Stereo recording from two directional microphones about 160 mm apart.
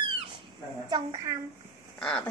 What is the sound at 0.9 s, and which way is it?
Babbling, 25° right (ahead or behind).